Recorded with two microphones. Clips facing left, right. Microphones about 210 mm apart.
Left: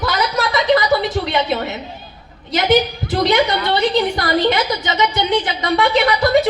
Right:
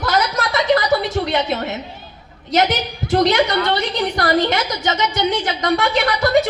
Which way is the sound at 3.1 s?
50° right (ahead or behind).